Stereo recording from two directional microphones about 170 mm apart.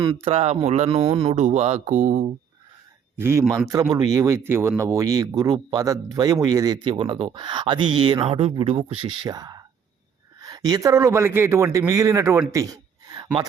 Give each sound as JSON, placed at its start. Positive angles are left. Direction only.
{"t": 0.2, "sound": "speech", "side_deg": -35}
{"t": 0.9, "sound": "a man's voice", "side_deg": -25}
{"t": 1.3, "sound": "speech", "side_deg": -40}
{"t": 3.2, "sound": "a man's voice", "side_deg": -15}